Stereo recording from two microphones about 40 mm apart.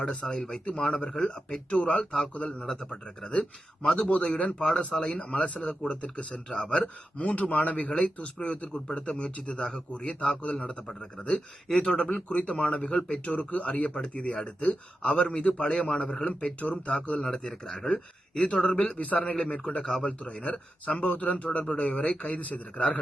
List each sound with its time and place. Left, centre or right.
0.3 s speech: centre
0.6 s a man's voice: left
1.7 s a man's voice: left
3.8 s a man's voice: centre
6.5 s a man's voice: left
6.8 s speech: left
8.7 s a man's voice: left
11.8 s a man's voice: left
17.2 s a man's voice: centre
18.9 s speech: left